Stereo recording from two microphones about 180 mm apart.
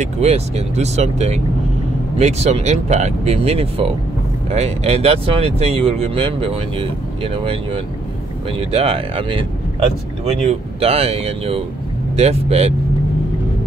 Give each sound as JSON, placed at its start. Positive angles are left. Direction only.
{"t": 0.0, "sound": "speech", "side_deg": -35}